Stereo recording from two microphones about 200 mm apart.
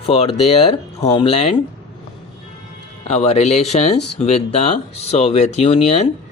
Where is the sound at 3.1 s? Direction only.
30° left (ahead or behind).